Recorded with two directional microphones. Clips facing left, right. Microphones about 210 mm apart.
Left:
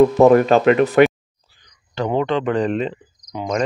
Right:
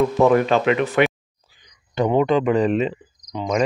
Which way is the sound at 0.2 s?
45° left (ahead or behind).